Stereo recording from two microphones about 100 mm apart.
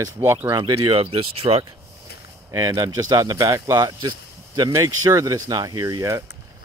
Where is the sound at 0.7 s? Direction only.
70° right (ahead or behind).